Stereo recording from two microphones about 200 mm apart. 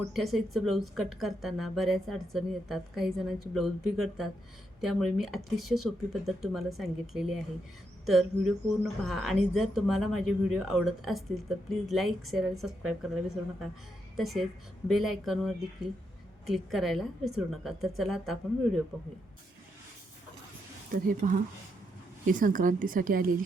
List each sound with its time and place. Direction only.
0.1 s speech: centre (ahead or behind)
20.9 s speech: 45° right (ahead or behind)